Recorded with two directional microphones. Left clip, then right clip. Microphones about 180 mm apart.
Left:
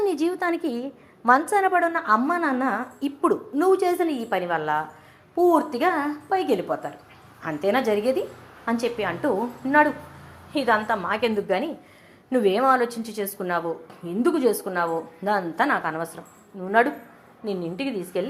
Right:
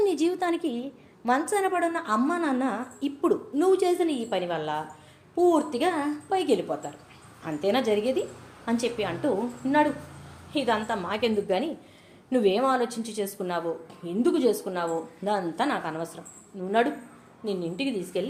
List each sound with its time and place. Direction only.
0.0 s a woman's voice: centre (ahead or behind)
17.7 s a woman's voice: centre (ahead or behind)